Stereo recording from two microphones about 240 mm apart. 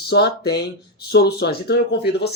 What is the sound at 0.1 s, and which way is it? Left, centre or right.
A man's voice, left.